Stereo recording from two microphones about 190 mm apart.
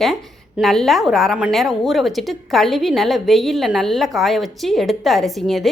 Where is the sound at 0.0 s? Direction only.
Centre (ahead or behind).